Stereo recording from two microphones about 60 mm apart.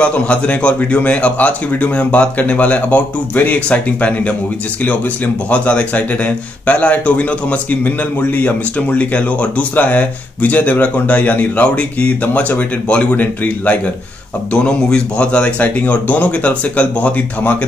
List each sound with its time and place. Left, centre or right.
0.0 s speech: centre
7.8 s speech: left
8.4 s speech: left
14.5 s speech: centre